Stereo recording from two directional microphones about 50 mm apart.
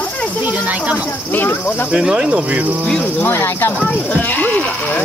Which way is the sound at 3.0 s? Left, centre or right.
Left.